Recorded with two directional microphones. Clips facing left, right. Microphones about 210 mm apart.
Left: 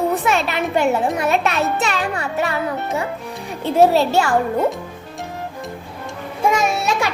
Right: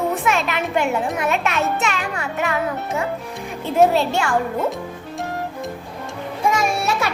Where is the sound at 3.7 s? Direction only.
35° left (ahead or behind).